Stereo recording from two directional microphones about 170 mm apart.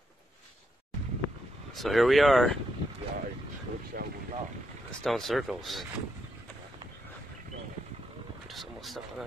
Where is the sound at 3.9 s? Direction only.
60° right (ahead or behind).